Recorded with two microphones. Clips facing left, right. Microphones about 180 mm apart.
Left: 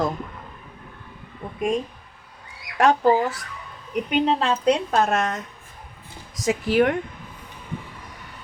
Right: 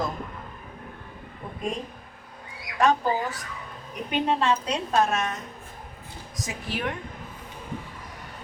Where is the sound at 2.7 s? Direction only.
70° left (ahead or behind).